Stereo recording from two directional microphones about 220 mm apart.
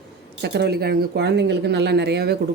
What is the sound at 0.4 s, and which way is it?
Speech, 50° right (ahead or behind).